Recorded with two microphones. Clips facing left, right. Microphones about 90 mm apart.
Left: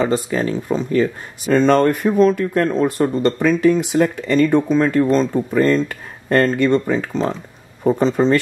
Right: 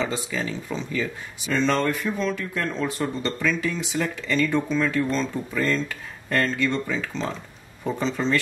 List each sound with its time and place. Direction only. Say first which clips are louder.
0.0 s speech: left 9 dB; 50° left (ahead or behind)